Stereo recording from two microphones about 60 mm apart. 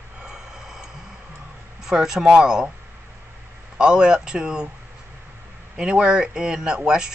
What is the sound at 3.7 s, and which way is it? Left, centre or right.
Speech, centre.